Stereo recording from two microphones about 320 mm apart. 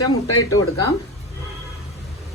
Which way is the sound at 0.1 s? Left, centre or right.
Left.